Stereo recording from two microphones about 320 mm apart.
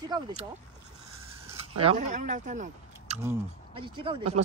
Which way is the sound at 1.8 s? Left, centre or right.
Centre.